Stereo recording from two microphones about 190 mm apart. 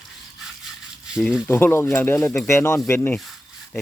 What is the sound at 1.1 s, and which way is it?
Speech, 5° right (ahead or behind).